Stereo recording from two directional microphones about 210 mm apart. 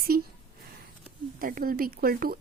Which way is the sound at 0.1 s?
45° right (ahead or behind).